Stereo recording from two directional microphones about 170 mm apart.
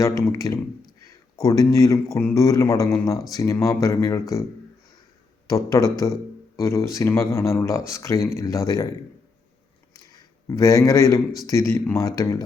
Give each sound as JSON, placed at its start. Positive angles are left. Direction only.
{"t": 0.2, "sound": "a man's voice", "side_deg": 20}
{"t": 5.5, "sound": "a man's voice", "side_deg": 20}
{"t": 10.1, "sound": "a man's voice", "side_deg": 20}